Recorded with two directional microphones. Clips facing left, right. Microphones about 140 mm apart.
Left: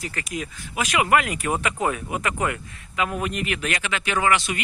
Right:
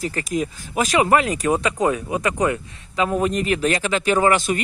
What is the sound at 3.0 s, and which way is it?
Speech, 30° right (ahead or behind).